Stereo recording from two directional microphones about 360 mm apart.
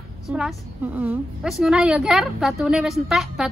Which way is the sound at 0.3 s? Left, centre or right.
Centre.